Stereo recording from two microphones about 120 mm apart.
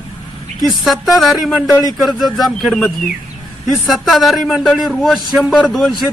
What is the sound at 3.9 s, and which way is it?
A man's voice, centre (ahead or behind).